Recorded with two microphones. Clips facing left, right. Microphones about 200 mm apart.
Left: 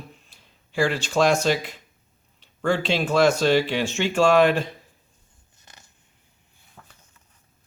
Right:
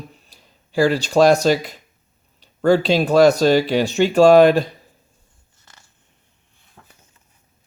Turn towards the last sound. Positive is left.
turn(degrees=15)  # may be behind; listen again after turning